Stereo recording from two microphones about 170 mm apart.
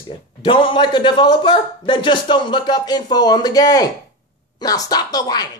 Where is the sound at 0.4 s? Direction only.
30° left (ahead or behind).